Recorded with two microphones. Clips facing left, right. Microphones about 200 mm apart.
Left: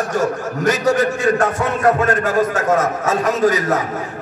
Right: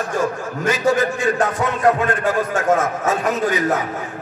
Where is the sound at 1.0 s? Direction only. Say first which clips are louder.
Left 2 dB; 70° left (ahead or behind).